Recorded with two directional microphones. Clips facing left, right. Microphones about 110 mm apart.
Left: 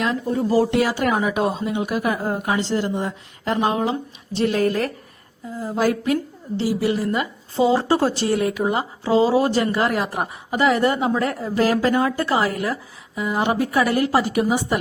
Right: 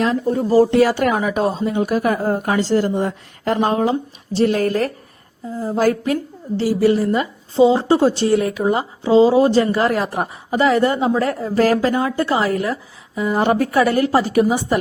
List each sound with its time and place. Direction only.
0.0 s a woman's voice: 35° right (ahead or behind)
14.0 s a woman's voice: 30° right (ahead or behind)